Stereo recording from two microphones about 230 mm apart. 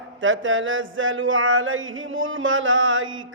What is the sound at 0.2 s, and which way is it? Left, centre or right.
A man's voice, right.